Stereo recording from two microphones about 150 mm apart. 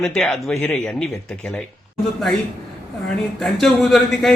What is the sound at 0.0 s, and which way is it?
Speech, 5° left (ahead or behind).